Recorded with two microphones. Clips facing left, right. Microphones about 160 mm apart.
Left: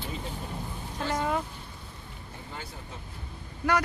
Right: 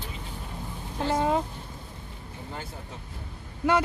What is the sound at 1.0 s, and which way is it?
Speech, 25° right (ahead or behind).